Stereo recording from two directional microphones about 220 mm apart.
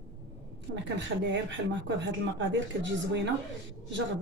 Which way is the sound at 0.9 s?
55° right (ahead or behind).